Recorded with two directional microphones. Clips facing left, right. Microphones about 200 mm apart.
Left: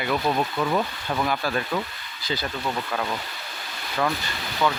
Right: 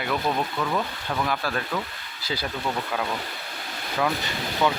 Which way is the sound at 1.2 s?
Centre (ahead or behind).